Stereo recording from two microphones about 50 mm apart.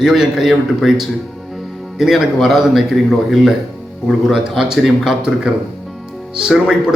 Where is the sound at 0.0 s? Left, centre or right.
Centre.